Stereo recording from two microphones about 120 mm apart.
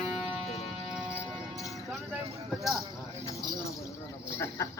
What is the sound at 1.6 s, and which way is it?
Vehicle, centre (ahead or behind).